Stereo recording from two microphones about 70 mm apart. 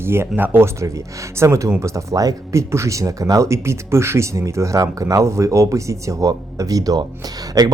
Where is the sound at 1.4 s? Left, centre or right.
Right.